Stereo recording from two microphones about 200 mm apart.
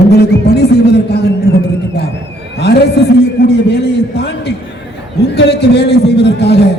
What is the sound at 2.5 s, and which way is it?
A man's voice, 55° left (ahead or behind).